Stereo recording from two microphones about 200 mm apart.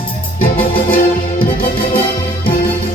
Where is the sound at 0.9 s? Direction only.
50° left (ahead or behind).